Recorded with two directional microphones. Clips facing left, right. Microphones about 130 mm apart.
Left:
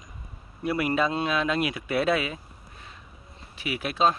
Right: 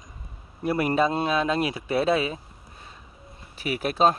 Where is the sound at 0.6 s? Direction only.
40° right (ahead or behind).